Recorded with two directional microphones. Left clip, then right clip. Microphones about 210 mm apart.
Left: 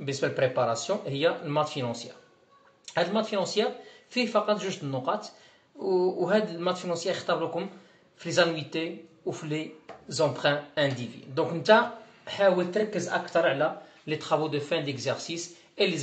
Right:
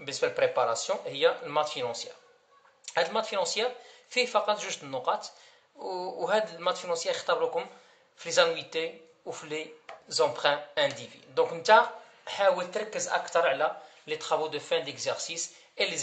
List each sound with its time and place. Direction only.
0.0 s speech: 35° right (ahead or behind)